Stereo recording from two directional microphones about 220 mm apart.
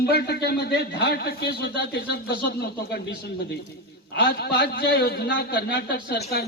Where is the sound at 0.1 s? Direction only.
45° left (ahead or behind).